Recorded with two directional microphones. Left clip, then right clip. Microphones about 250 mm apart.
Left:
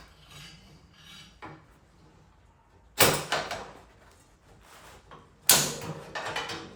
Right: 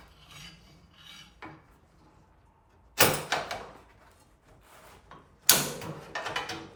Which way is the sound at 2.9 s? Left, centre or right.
Centre.